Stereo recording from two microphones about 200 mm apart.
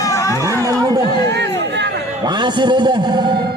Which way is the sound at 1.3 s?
60° right (ahead or behind).